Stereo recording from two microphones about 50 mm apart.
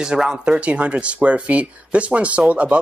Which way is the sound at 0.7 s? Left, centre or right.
Right.